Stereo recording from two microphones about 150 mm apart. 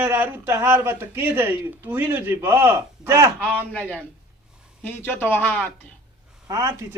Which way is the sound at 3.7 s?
10° left (ahead or behind).